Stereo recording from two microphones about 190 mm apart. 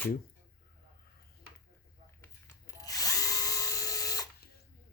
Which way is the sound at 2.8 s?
20° left (ahead or behind).